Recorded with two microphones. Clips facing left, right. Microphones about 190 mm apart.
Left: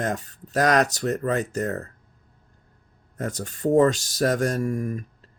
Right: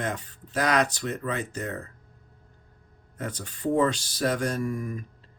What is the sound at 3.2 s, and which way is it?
Speech, 45° left (ahead or behind).